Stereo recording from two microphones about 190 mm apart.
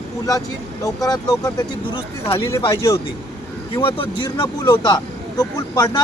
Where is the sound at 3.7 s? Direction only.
25° left (ahead or behind).